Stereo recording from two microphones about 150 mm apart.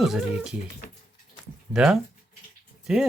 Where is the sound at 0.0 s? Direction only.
5° right (ahead or behind).